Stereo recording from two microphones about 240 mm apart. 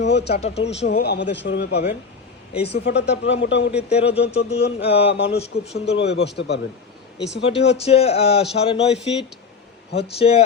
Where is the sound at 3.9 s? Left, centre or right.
Left.